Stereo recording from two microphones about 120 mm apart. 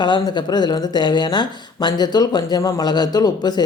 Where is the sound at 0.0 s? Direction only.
40° left (ahead or behind).